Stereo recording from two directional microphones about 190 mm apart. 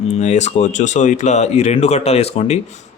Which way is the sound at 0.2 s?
35° left (ahead or behind).